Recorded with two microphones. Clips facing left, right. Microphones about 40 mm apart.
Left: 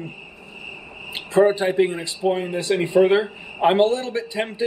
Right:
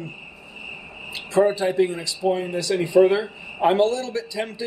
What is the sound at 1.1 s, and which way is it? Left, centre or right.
A man's voice, left.